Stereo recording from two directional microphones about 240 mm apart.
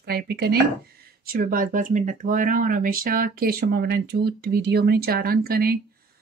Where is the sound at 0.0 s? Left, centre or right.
Right.